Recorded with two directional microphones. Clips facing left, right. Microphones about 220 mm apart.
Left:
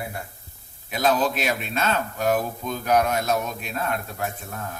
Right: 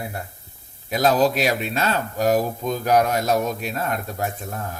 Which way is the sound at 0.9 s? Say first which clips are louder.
Right 4 dB; 40° right (ahead or behind).